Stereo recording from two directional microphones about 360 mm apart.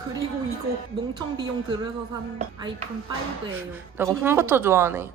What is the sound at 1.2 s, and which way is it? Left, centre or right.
Speech, centre.